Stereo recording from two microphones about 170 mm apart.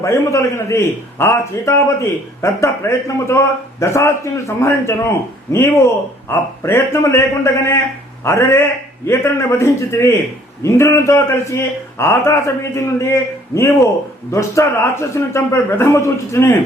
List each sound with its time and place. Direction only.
0.0 s a man's voice: 15° left (ahead or behind)